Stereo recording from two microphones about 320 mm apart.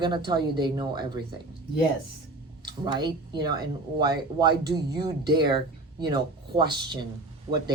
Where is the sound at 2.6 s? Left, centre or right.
Centre.